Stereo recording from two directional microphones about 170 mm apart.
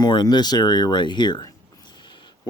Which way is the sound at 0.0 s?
25° left (ahead or behind).